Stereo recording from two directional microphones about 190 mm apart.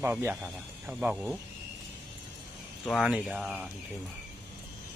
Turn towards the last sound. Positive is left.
turn(degrees=-5)  # may be behind; listen again after turning